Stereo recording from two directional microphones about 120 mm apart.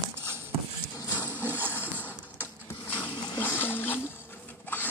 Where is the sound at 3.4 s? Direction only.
15° left (ahead or behind).